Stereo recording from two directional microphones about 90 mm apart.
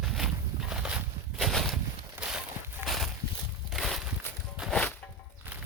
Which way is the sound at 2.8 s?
Centre (ahead or behind).